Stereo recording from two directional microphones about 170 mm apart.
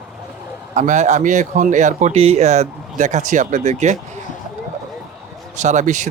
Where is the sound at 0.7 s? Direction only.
45° right (ahead or behind).